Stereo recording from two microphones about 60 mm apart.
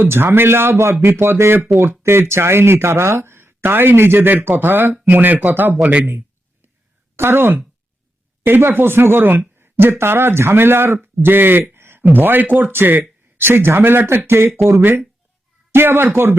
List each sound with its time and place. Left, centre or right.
0.0 s speech: right
5.8 s speech: right
6.1 s a sound: right
7.2 s speech: right
11.7 s a sound: right
12.0 s speech: right